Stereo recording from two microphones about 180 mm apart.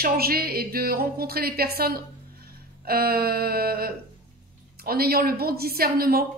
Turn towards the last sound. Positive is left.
turn(degrees=-55)  # may be behind; listen again after turning